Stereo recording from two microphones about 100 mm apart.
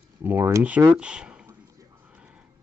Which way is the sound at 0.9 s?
10° right (ahead or behind).